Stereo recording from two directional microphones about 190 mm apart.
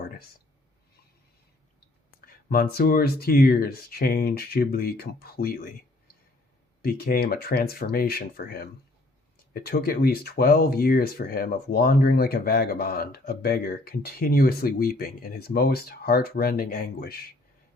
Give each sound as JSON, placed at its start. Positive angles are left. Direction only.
{"t": 2.2, "sound": "speech", "side_deg": 50}
{"t": 6.8, "sound": "speech", "side_deg": 55}